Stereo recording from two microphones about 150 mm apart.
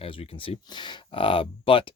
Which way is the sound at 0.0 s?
35° left (ahead or behind).